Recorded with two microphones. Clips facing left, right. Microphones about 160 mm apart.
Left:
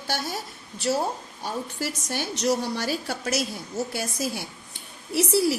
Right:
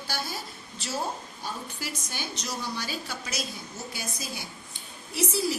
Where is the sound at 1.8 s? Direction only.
70° left (ahead or behind).